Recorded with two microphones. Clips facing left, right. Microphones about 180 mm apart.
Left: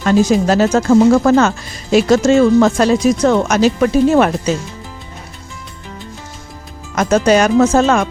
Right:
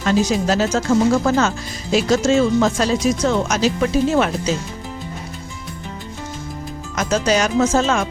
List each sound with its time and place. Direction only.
0.0 s speech: 50° left (ahead or behind)
6.9 s speech: 55° left (ahead or behind)